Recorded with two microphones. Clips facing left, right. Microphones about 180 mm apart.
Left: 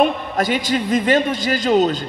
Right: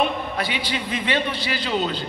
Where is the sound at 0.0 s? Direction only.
45° left (ahead or behind).